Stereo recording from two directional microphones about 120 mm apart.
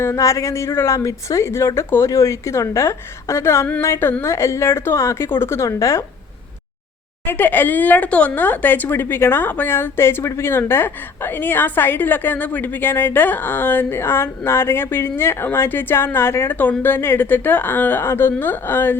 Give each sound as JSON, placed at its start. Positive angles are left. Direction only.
{"t": 0.0, "sound": "speech", "side_deg": 25}
{"t": 7.3, "sound": "speech", "side_deg": 15}